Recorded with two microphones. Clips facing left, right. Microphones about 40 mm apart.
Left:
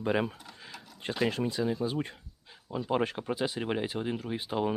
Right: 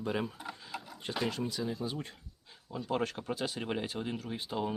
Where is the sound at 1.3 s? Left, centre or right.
Left.